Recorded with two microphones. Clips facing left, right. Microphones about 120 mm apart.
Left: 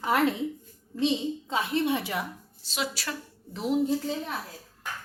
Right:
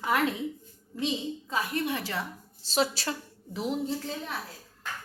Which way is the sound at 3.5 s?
Centre (ahead or behind).